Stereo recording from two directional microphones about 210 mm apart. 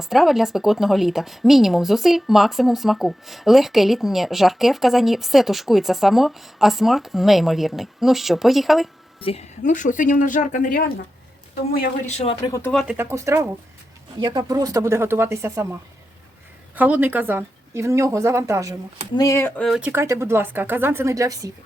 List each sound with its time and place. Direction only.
0.0 s a woman's voice: centre (ahead or behind)
9.2 s a woman's voice: 30° left (ahead or behind)
12.4 s speech: 15° left (ahead or behind)
12.7 s speech: 5° right (ahead or behind)
16.7 s speech: 10° right (ahead or behind)
19.1 s speech: 15° left (ahead or behind)
19.9 s speech: 10° right (ahead or behind)